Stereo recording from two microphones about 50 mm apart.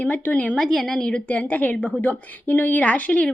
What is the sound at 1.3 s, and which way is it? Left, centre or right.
A woman's voice, left.